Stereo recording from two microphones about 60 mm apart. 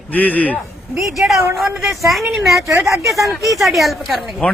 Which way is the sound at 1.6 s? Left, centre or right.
Centre.